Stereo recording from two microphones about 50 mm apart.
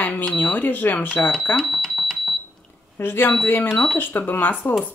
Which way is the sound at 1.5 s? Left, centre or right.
Centre.